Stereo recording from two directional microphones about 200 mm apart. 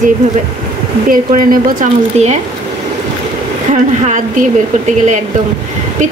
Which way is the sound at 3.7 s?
35° right (ahead or behind).